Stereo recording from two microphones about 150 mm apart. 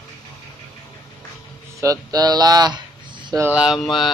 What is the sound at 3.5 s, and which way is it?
Speech, 5° right (ahead or behind).